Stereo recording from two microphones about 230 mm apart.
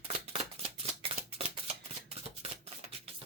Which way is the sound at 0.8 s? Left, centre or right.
Right.